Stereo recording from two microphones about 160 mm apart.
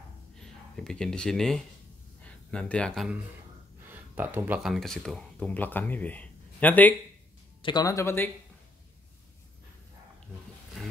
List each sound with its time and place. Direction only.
0.4 s speech: 5° left (ahead or behind)
3.9 s a sound: 10° right (ahead or behind)
4.6 s speech: centre (ahead or behind)
7.6 s speech: 25° left (ahead or behind)
10.8 s roaring cats: centre (ahead or behind)